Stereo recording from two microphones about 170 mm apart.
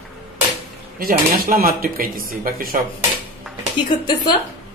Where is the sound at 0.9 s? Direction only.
60° right (ahead or behind).